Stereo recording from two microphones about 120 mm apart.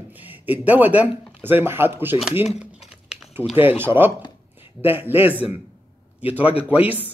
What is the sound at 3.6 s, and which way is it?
A man's voice, 20° right (ahead or behind).